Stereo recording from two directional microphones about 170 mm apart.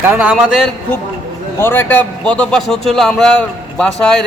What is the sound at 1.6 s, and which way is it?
A man's voice, 15° left (ahead or behind).